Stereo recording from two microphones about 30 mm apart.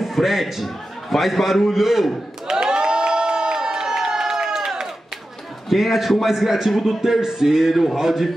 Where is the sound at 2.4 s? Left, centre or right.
Right.